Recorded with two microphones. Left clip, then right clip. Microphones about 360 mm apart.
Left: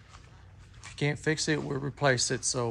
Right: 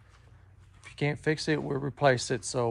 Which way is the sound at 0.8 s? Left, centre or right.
Centre.